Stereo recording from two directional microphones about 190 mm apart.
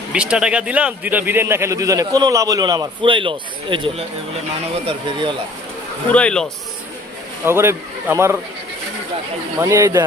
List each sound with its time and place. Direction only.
0.1 s a man's voice: 5° right (ahead or behind); by 5.3 s 25° right (ahead or behind)
6.1 s a man's voice: 5° left (ahead or behind)
7.4 s a man's voice: 15° right (ahead or behind)
9.6 s a man's voice: 15° right (ahead or behind)